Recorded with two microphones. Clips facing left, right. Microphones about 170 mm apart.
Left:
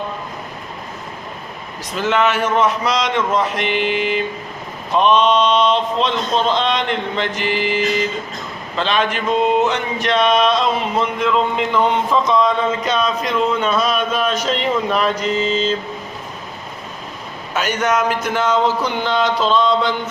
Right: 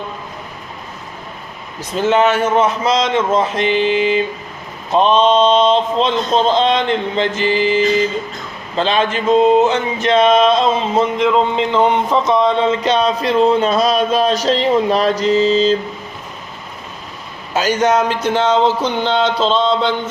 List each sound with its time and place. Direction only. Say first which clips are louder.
2.0 s speech: right 4 dB; 25° right (ahead or behind)
4.9 s speech: right 2 dB; 30° right (ahead or behind)
17.5 s speech: right 4 dB; 35° right (ahead or behind)